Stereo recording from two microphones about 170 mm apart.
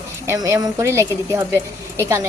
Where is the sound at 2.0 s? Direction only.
15° right (ahead or behind).